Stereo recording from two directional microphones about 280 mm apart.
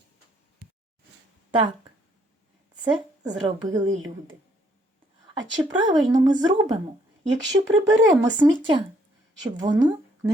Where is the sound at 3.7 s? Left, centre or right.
Centre.